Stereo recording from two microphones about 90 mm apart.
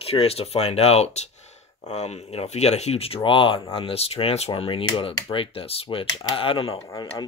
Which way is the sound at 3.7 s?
90° left.